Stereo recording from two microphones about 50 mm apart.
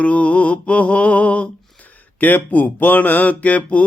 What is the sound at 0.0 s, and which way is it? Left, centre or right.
Mantra, left.